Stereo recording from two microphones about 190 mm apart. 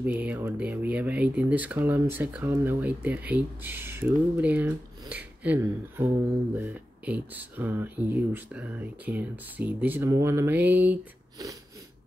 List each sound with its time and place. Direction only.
0.0 s speech: 10° right (ahead or behind)